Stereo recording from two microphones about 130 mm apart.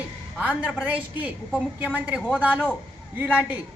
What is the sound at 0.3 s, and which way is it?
A man's voice, 10° right (ahead or behind).